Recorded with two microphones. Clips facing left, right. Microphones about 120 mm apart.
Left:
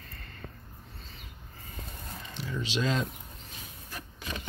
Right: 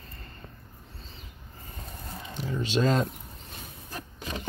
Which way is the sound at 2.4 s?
45° right (ahead or behind).